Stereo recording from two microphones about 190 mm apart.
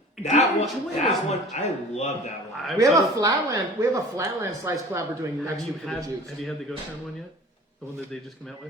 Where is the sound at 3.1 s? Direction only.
20° right (ahead or behind).